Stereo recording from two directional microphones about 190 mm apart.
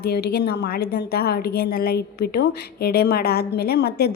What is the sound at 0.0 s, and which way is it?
A woman's voice, 55° left (ahead or behind).